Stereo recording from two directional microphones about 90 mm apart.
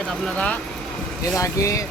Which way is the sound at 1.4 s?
40° left (ahead or behind).